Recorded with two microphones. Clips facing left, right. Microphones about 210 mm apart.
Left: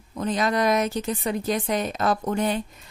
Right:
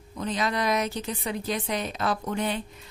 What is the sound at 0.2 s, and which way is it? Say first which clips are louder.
Speech: left 5 dB; 45° left (ahead or behind).